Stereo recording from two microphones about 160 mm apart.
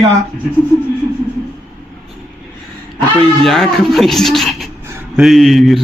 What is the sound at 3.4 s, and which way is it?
A man's voice, centre (ahead or behind).